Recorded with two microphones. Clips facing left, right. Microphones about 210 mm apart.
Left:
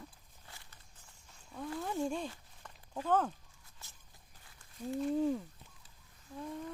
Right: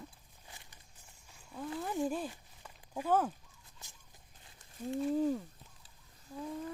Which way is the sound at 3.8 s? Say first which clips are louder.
Right 1 dB; 15° right (ahead or behind).